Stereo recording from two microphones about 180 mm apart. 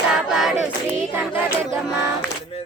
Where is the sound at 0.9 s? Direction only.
10° right (ahead or behind).